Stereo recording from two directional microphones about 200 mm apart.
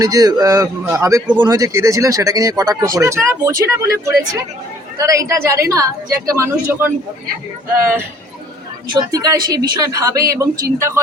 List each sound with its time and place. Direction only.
0.0 s speech: 20° right (ahead or behind)
8.9 s speech: 20° right (ahead or behind)